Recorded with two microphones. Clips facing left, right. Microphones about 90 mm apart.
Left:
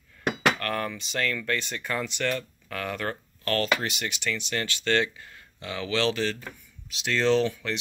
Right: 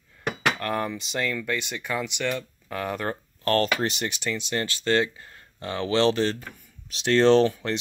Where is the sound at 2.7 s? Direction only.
25° right (ahead or behind).